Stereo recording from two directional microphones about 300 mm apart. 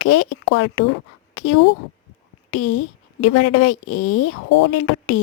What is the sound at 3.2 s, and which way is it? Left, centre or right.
A woman's voice, left.